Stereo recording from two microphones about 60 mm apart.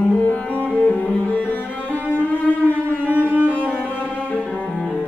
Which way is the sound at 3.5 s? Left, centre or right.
Left.